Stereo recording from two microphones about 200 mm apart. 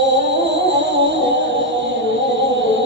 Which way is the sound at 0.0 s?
65° right (ahead or behind).